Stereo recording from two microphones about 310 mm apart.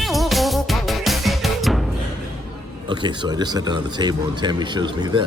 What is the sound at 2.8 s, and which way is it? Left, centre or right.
Speech, centre.